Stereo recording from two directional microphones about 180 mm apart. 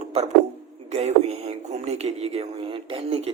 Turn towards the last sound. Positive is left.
turn(degrees=-35)  # may be behind; listen again after turning